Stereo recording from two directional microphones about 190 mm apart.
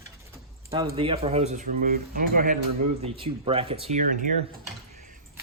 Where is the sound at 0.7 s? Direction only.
25° right (ahead or behind).